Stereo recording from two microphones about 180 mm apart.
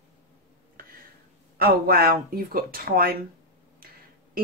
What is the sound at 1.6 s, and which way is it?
Speech, 55° right (ahead or behind).